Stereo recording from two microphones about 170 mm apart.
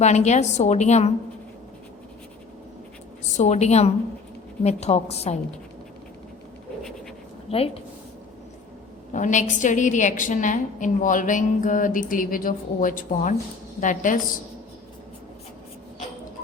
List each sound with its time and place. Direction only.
0.0 s a woman's voice: 40° left (ahead or behind)
3.3 s a woman's voice: 40° left (ahead or behind)
7.5 s a woman's voice: 35° left (ahead or behind)
9.1 s a woman's voice: 45° left (ahead or behind)